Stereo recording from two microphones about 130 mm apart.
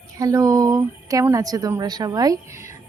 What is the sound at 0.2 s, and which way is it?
A woman's voice, 25° right (ahead or behind).